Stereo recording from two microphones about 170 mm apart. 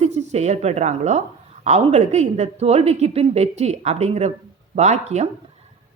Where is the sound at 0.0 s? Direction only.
40° right (ahead or behind).